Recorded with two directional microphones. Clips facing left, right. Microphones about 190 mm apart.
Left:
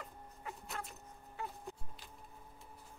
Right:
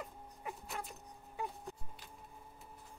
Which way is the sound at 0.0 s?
15° right (ahead or behind).